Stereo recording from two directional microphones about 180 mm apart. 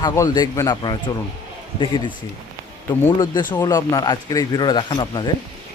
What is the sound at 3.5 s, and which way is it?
Speech, 20° left (ahead or behind).